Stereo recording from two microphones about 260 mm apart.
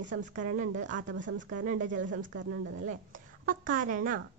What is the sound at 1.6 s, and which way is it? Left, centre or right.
Speech, right.